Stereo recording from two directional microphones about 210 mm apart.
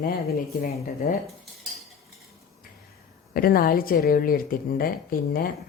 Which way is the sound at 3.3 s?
45° left (ahead or behind).